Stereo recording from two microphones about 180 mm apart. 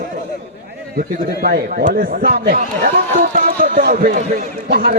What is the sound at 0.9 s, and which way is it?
A man's voice, 55° right (ahead or behind).